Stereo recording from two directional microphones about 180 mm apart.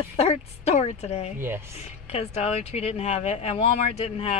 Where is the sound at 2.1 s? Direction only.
35° left (ahead or behind).